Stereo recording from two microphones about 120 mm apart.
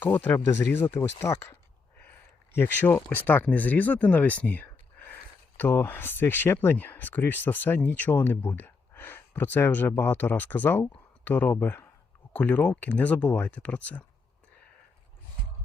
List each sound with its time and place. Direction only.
0.0 s speech: 15° left (ahead or behind)